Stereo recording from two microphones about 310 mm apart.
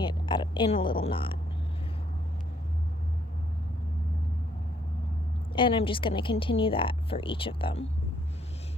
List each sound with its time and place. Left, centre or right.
0.0 s speech: centre
5.5 s speech: centre